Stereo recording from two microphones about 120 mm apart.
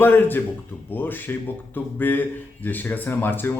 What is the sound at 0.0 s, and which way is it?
Speech, 15° left (ahead or behind).